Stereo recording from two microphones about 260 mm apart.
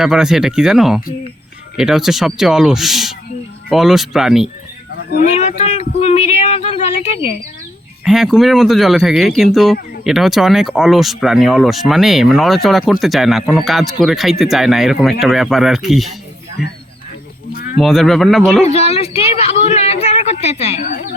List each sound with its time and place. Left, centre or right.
0.0 s speech: centre
5.1 s speech: left
8.0 s speech: centre
17.5 s a sound: left
17.7 s speech: centre
18.6 s speech: left